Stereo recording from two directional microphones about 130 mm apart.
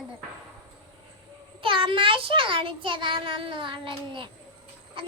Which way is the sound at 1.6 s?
40° right (ahead or behind).